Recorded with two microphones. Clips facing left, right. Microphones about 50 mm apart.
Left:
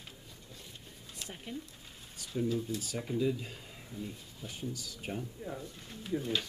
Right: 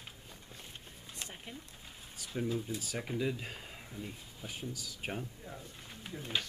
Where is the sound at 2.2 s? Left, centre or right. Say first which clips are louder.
Left 3 dB; centre.